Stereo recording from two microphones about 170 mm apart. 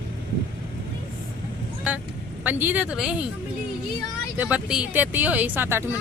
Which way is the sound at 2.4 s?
10° right (ahead or behind).